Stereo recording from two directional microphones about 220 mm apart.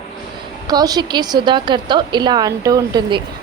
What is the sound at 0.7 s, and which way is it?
A woman's voice, 20° right (ahead or behind).